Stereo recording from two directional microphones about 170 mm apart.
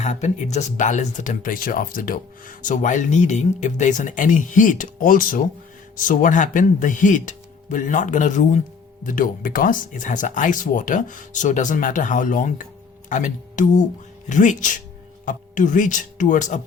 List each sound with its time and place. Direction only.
0.0 s speech: 45° left (ahead or behind)